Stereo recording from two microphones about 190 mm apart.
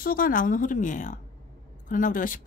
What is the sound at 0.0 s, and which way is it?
A woman's voice, 50° left (ahead or behind).